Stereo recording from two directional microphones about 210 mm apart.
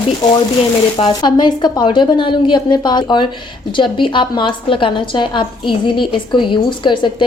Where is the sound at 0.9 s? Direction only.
20° left (ahead or behind).